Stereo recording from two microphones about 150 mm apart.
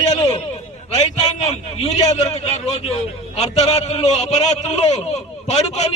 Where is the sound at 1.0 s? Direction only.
45° left (ahead or behind).